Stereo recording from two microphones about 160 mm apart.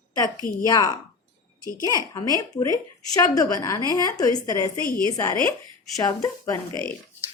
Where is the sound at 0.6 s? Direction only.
20° left (ahead or behind).